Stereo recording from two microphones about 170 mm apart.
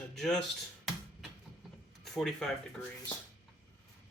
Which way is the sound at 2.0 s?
5° left (ahead or behind).